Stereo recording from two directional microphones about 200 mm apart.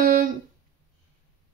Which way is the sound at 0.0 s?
40° right (ahead or behind).